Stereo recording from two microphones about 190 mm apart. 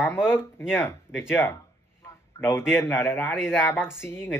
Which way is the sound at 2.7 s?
10° left (ahead or behind).